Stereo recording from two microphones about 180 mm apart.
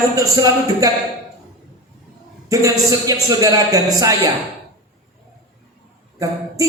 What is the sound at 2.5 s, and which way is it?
Speech, 20° right (ahead or behind).